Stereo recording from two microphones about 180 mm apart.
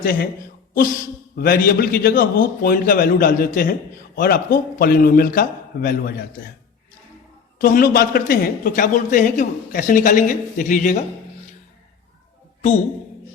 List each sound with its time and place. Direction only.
0.0 s a man's voice: 50° left (ahead or behind)
1.4 s a man's voice: 55° left (ahead or behind)
7.6 s a man's voice: 55° left (ahead or behind)